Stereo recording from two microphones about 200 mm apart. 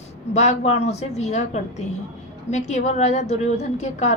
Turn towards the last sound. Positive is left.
turn(degrees=35)  # may be behind; listen again after turning